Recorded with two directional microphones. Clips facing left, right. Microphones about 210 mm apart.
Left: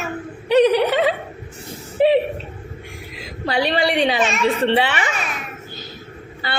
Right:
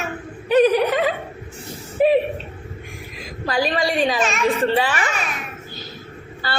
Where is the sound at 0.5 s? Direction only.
25° left (ahead or behind).